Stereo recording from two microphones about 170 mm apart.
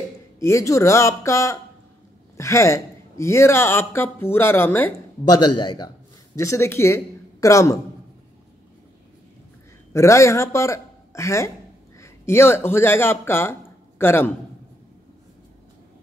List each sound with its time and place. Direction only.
0.4 s speech: 15° left (ahead or behind)
5.3 s a man's voice: 25° left (ahead or behind)
9.9 s speech: 15° left (ahead or behind)